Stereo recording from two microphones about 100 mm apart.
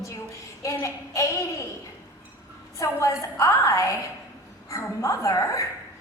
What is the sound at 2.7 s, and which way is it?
A woman's voice, 30° left (ahead or behind).